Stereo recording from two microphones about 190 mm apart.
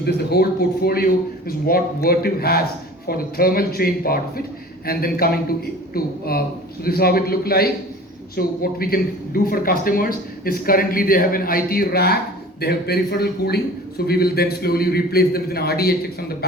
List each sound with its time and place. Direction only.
0.0 s a man's voice: 55° left (ahead or behind)